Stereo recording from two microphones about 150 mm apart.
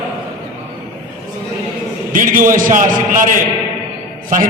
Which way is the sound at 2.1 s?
65° right (ahead or behind).